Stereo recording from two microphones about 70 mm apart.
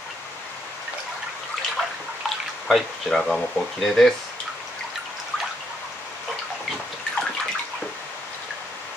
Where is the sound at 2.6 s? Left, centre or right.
Centre.